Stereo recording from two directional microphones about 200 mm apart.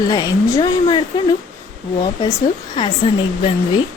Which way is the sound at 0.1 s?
20° left (ahead or behind).